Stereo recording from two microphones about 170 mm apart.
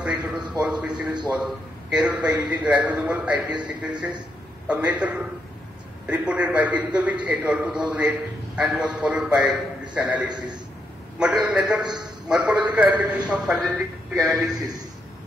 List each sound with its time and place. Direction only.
0.0 s a man's voice: 5° right (ahead or behind)
1.0 s a man's voice: 25° right (ahead or behind)
1.3 s a man's voice: 5° right (ahead or behind)
4.6 s a man's voice: 10° right (ahead or behind)
10.3 s a man's voice: 25° right (ahead or behind)
11.1 s a man's voice: 5° right (ahead or behind)